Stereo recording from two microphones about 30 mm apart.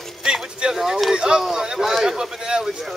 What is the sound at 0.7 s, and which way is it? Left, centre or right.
A man's voice, centre.